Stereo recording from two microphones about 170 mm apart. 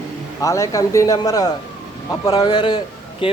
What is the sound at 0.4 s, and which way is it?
A man's voice, 20° left (ahead or behind).